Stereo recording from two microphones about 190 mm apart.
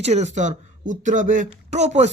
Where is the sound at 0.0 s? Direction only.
35° right (ahead or behind).